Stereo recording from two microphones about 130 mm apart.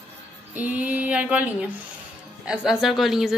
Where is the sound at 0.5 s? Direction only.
10° right (ahead or behind).